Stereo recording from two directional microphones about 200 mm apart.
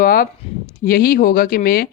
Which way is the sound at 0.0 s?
45° left (ahead or behind).